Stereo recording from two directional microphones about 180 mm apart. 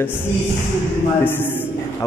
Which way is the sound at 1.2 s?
10° left (ahead or behind).